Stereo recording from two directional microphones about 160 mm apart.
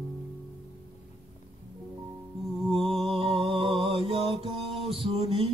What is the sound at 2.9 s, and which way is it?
Mantra, 35° right (ahead or behind).